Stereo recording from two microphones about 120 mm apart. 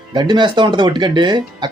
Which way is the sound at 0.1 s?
35° right (ahead or behind).